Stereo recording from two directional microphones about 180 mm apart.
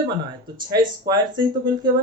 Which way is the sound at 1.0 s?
25° right (ahead or behind).